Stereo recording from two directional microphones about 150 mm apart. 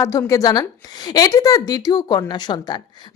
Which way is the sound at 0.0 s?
20° left (ahead or behind).